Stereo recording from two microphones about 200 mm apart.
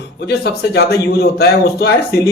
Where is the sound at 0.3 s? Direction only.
55° left (ahead or behind).